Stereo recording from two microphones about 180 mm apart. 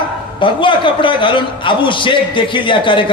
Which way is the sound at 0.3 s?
25° left (ahead or behind).